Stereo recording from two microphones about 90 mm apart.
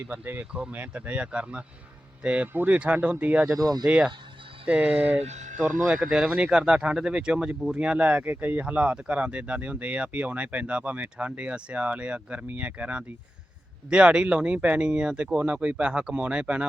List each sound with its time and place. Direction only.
0.0 s speech: 20° right (ahead or behind)
3.5 s speech: 45° right (ahead or behind)
3.8 s speech: 10° right (ahead or behind)
5.8 s speech: 5° right (ahead or behind)